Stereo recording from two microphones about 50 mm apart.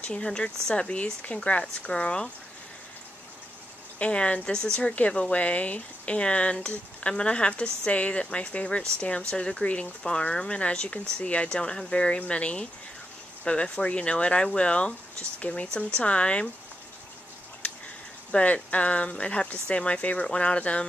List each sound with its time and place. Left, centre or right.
0.0 s speech: left
4.0 s speech: left
18.3 s speech: left